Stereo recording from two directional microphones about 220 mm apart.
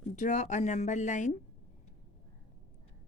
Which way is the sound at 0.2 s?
35° left (ahead or behind).